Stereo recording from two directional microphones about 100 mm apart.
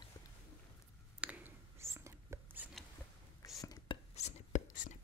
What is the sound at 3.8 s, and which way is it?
Chopping, 90° left.